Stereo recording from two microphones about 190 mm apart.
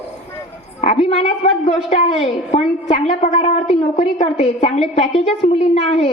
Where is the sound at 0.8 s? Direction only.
35° left (ahead or behind).